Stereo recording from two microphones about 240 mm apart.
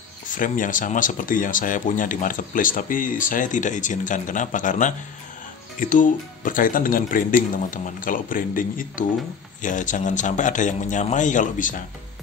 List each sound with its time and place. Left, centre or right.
0.3 s speech: left